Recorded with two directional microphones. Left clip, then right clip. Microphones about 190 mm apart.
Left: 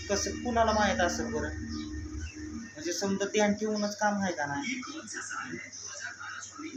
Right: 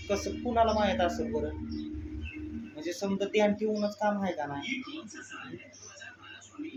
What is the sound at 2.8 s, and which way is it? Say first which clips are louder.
A man's voice: left 1 dB; 5° right (ahead or behind).